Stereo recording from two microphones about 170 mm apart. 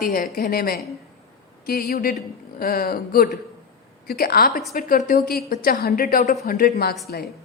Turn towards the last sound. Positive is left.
turn(degrees=65)  # may be behind; listen again after turning